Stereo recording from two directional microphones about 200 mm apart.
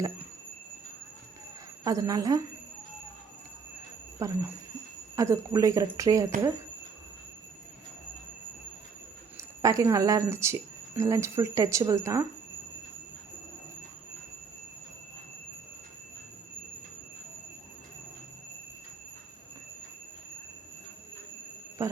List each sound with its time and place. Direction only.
1.8 s speech: 15° right (ahead or behind)
4.2 s speech: 15° right (ahead or behind)
9.4 s speech: 15° right (ahead or behind)